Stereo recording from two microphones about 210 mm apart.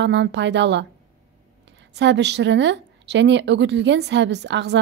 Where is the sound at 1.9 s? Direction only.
55° right (ahead or behind).